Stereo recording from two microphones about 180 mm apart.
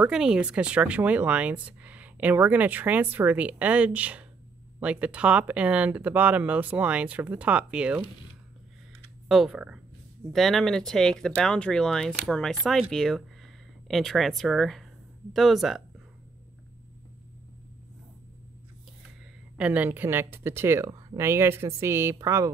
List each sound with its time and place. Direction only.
0.0 s speech: 5° right (ahead or behind)
9.3 s speech: centre (ahead or behind)
19.5 s speech: 10° right (ahead or behind)